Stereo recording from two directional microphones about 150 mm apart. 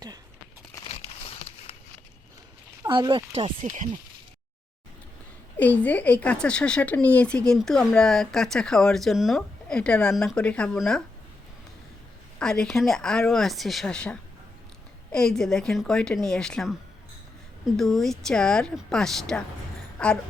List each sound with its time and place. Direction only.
0.9 s crumpling: 40° left (ahead or behind)
2.9 s speech: 30° right (ahead or behind)
3.6 s speech: 60° right (ahead or behind)
5.5 s speech: 10° left (ahead or behind)
12.4 s speech: 5° left (ahead or behind)
17.7 s speech: centre (ahead or behind)